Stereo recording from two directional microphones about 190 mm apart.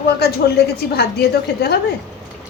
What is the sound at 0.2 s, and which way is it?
A woman's voice, 55° left (ahead or behind).